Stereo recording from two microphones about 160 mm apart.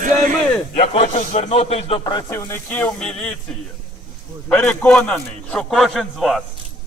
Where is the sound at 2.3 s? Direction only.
15° left (ahead or behind).